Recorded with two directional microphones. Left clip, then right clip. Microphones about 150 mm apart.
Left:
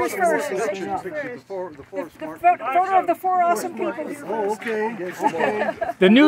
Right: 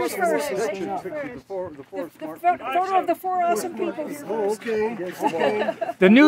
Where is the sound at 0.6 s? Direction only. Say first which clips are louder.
Left 1 dB; 65° right (ahead or behind).